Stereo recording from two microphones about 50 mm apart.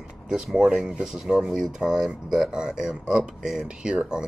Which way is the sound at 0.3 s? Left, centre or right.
Centre.